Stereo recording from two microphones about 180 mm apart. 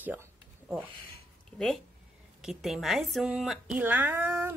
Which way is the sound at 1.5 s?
Centre (ahead or behind).